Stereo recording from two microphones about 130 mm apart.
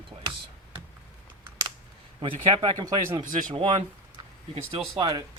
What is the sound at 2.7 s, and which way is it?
Speech, 30° right (ahead or behind).